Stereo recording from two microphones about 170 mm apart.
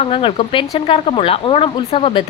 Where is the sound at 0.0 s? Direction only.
30° left (ahead or behind).